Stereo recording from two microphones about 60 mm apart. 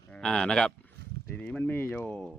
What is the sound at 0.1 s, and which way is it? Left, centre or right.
Speech, centre.